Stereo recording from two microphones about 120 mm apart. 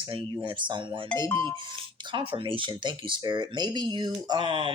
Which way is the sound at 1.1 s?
25° left (ahead or behind).